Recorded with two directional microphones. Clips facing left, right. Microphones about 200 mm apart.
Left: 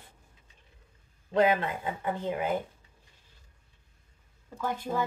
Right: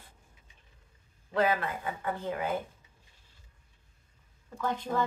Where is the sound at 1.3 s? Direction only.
20° left (ahead or behind).